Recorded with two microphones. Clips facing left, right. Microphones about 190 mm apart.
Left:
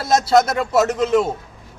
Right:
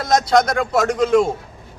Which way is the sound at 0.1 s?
5° left (ahead or behind).